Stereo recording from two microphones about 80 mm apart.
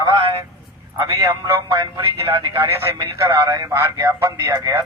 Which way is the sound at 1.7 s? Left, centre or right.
Right.